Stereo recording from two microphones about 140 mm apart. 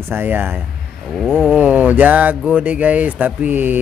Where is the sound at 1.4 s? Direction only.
10° right (ahead or behind).